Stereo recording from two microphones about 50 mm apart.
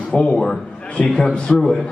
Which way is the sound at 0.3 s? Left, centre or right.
Centre.